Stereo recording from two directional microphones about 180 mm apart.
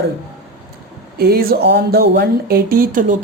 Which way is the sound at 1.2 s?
55° right (ahead or behind).